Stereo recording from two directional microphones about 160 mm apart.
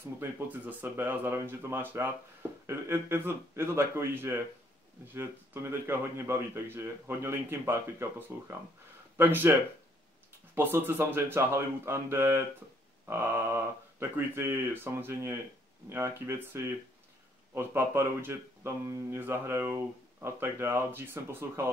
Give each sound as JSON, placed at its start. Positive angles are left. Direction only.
{"t": 0.2, "sound": "speech", "side_deg": -10}